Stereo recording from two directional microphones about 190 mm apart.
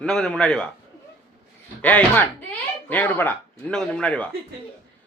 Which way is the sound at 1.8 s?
5° left (ahead or behind).